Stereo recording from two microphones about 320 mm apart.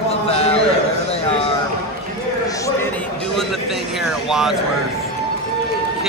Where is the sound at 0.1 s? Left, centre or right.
Centre.